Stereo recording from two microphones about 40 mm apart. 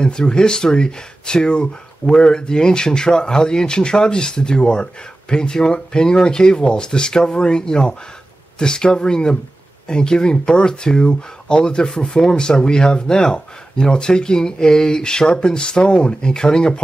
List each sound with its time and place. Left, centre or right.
0.0 s speech: left